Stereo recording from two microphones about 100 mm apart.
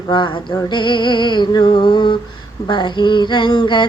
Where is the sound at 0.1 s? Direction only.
55° left (ahead or behind).